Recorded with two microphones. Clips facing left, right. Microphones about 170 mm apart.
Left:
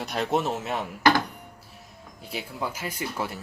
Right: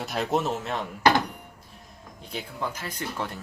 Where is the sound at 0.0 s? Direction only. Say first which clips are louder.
Even; centre (ahead or behind).